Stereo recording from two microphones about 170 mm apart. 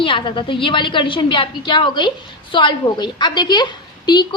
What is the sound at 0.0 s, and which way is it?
A woman's voice, 30° left (ahead or behind).